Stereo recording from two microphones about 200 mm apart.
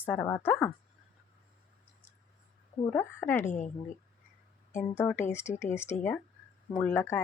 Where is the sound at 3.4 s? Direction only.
40° left (ahead or behind).